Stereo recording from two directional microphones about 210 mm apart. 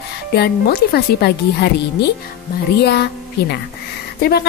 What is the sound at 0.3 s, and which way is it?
Speech, 50° left (ahead or behind).